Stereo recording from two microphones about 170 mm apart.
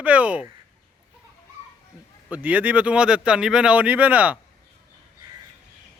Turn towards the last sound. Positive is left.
turn(degrees=-10)  # may be behind; listen again after turning